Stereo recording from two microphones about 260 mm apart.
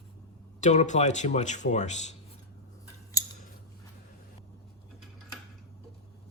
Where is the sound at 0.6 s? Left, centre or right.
Left.